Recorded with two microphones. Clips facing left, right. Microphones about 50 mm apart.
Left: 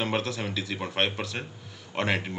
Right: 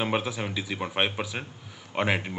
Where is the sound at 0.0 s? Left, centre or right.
Centre.